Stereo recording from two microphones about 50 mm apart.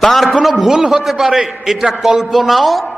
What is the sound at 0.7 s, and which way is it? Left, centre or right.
A man's voice, centre.